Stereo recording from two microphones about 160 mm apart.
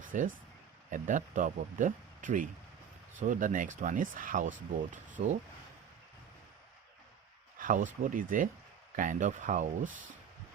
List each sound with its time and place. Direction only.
0.0 s a sound: 55° right (ahead or behind)
0.9 s speech: 55° right (ahead or behind)
7.6 s speech: 55° right (ahead or behind)